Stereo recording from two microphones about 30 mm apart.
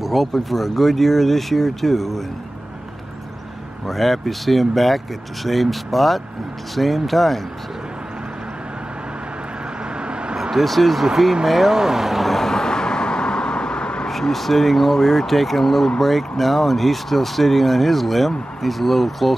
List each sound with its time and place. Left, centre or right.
0.0 s speech: centre
3.8 s speech: centre
10.3 s a sound: centre
10.6 s speech: centre
12.3 s vehicle: centre; by 14.0 s left
14.3 s speech: centre